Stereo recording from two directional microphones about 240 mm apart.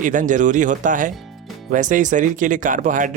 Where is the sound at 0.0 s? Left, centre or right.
Right.